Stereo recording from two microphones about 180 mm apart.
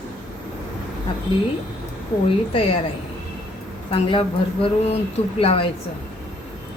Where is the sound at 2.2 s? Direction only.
30° left (ahead or behind).